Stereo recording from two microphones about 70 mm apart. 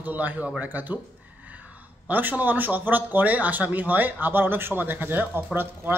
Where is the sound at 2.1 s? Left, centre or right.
Right.